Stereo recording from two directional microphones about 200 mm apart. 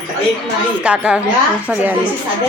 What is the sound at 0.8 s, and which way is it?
Speech, 5° right (ahead or behind).